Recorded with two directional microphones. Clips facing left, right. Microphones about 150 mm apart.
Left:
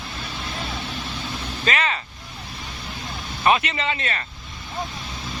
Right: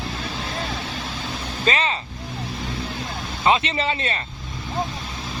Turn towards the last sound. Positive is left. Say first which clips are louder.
# right 2 dB
turn(degrees=-30)  # may be behind; listen again after turning